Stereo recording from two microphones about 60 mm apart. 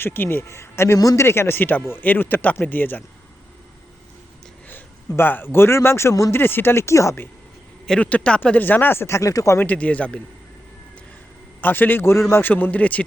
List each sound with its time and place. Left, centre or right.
0.0 s speech: left
0.4 s speech: left
4.7 s speech: left
6.3 s speech: left
8.0 s speech: left
9.2 s speech: left
9.6 s speech: left
11.6 s speech: left